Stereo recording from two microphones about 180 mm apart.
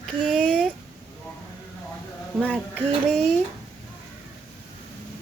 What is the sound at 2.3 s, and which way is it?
Speech, 5° left (ahead or behind).